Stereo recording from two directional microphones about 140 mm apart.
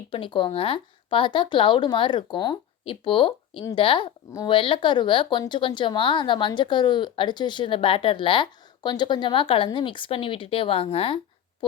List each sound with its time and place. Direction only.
0.1 s speech: 40° left (ahead or behind)